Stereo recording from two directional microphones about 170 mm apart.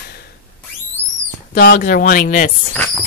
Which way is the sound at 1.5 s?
60° left (ahead or behind).